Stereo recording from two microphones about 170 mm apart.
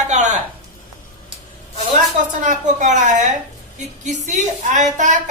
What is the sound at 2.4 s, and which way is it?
Speech, 50° right (ahead or behind).